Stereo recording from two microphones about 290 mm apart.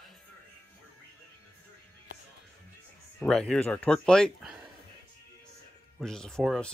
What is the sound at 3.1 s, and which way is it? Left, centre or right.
Speech, centre.